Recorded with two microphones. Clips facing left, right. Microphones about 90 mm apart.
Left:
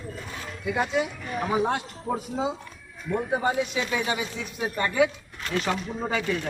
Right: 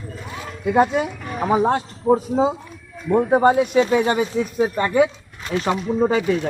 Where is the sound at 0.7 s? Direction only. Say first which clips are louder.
Right 8 dB; 40° right (ahead or behind).